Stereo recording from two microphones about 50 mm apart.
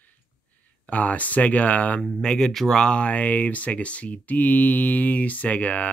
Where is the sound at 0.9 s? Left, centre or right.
Left.